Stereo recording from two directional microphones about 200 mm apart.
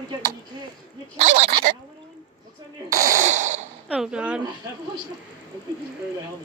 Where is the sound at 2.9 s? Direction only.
45° right (ahead or behind).